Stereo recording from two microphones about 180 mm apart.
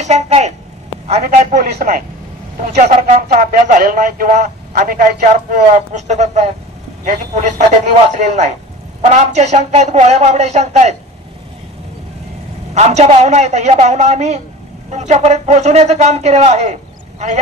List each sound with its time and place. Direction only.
0.0 s speech: 40° right (ahead or behind)
1.7 s speech: 60° right (ahead or behind)
2.7 s speech: 40° right (ahead or behind)
12.7 s speech: 40° right (ahead or behind)